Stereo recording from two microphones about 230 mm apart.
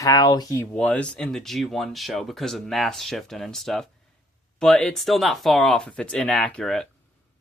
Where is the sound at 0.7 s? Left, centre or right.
Centre.